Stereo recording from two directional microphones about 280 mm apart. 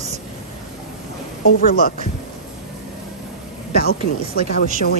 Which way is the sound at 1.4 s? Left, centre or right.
Left.